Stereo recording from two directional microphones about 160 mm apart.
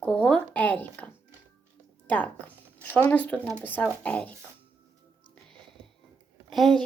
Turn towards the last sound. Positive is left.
turn(degrees=0)  # may be behind; listen again after turning